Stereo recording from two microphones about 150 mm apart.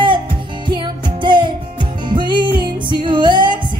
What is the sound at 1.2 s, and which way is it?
Music, 30° right (ahead or behind).